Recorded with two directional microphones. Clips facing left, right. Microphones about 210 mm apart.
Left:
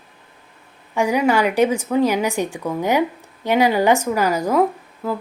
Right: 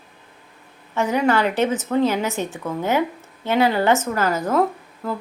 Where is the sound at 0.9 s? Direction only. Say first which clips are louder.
Left 2 dB; 10° left (ahead or behind).